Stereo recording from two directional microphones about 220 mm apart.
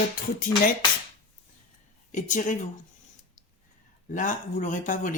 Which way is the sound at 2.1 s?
35° left (ahead or behind).